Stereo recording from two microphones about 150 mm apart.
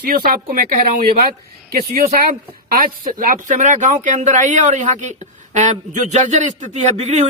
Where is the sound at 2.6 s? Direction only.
70° right (ahead or behind).